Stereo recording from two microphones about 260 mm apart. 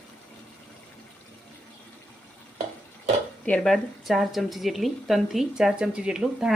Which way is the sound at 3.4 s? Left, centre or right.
Centre.